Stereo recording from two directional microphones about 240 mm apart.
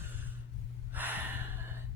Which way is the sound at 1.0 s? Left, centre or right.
Centre.